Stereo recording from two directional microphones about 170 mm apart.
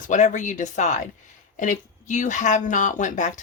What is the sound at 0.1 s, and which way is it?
Speech, 45° left (ahead or behind).